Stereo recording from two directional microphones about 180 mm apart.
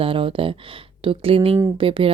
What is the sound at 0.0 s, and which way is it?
Speech, 30° right (ahead or behind).